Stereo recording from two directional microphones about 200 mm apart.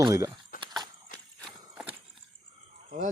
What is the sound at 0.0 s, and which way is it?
Speech, 15° right (ahead or behind).